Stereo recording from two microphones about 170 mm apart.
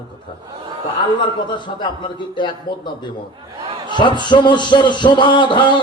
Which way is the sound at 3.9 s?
25° left (ahead or behind).